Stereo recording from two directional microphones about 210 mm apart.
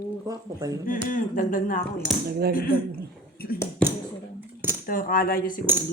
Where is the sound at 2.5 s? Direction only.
45° left (ahead or behind).